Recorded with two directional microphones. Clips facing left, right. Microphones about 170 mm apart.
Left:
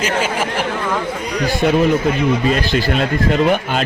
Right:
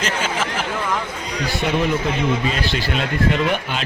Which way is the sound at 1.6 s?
45° left (ahead or behind).